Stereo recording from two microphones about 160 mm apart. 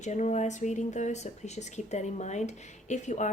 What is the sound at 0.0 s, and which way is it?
A woman's voice, 45° left (ahead or behind).